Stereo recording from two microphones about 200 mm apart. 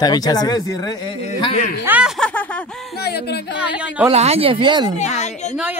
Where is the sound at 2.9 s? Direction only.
55° left (ahead or behind).